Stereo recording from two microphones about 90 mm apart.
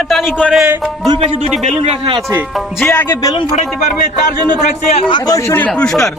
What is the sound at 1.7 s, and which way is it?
Speech, 80° right.